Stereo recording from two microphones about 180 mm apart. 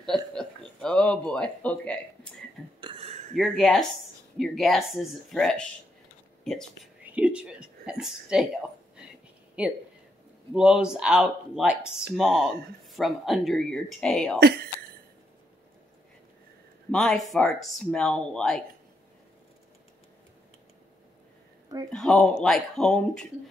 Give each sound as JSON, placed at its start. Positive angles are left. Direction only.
{"t": 0.0, "sound": "a sound", "side_deg": 5}
{"t": 2.8, "sound": "a sound", "side_deg": -30}
{"t": 3.3, "sound": "speech", "side_deg": 0}
{"t": 7.0, "sound": "a sound", "side_deg": -5}
{"t": 8.0, "sound": "speech", "side_deg": 0}
{"t": 9.6, "sound": "speech", "side_deg": -5}
{"t": 14.4, "sound": "speech", "side_deg": -60}
{"t": 16.9, "sound": "speech", "side_deg": 0}
{"t": 21.9, "sound": "speech", "side_deg": 5}